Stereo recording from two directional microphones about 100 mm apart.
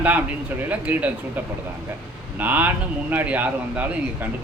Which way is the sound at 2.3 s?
15° right (ahead or behind).